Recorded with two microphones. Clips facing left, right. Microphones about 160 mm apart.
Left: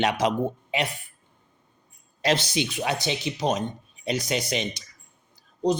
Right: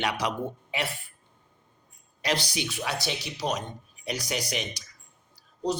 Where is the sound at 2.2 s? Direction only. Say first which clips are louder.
Left 5 dB; 25° left (ahead or behind).